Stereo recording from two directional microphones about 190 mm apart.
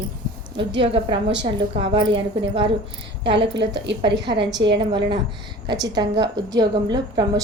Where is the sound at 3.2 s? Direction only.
65° right (ahead or behind).